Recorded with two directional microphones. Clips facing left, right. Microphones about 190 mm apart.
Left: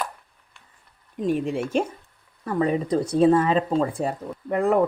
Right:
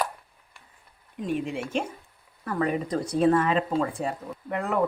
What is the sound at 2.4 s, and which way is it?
Speech, 20° left (ahead or behind).